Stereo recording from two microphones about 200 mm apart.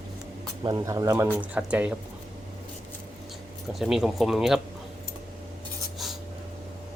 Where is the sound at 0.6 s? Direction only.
20° right (ahead or behind).